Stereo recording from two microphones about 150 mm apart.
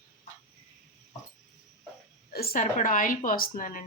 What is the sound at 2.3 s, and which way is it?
A woman's voice, 80° left.